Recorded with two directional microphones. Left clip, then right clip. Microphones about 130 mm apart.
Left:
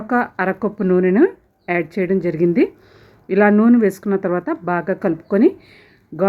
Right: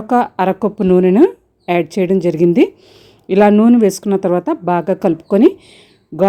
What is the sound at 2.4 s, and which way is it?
Speech, 50° right (ahead or behind).